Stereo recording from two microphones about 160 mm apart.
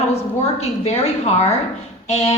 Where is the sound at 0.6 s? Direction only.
40° left (ahead or behind).